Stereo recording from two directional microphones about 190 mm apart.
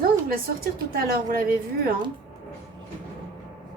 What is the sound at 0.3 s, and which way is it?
A woman's voice, 50° right (ahead or behind).